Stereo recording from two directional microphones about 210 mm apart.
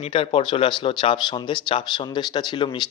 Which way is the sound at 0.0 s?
25° left (ahead or behind).